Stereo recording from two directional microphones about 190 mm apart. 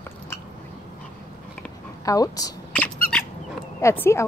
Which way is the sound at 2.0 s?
20° left (ahead or behind).